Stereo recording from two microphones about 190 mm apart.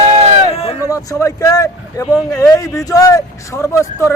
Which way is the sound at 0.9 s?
20° left (ahead or behind).